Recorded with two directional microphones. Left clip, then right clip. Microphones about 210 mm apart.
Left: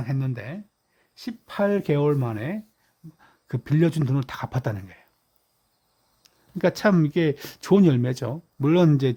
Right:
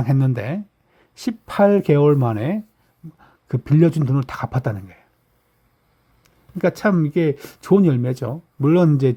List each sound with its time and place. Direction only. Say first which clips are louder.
0.0 s speech: right 9 dB; 20° right (ahead or behind); by 5.0 s centre (ahead or behind)
6.2 s a sound: right 3 dB; 5° left (ahead or behind)
7.1 s speech: right 4 dB; centre (ahead or behind)